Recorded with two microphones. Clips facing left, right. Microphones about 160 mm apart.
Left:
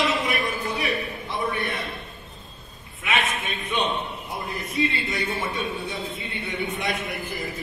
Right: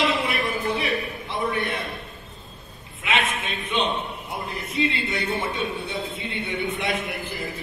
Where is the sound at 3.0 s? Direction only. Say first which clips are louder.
Right 1 dB; 30° right (ahead or behind).